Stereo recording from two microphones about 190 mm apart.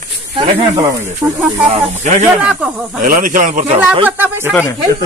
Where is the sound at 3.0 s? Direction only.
45° right (ahead or behind).